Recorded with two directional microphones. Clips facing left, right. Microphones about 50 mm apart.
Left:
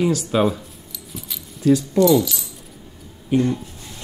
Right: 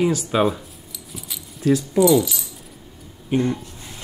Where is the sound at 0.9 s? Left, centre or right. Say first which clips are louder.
Left 1 dB; centre.